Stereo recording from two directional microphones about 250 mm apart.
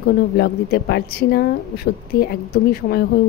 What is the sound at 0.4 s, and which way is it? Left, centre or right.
Speech, left.